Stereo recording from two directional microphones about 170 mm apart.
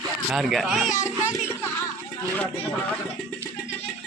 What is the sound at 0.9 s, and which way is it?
Music, 45° left (ahead or behind).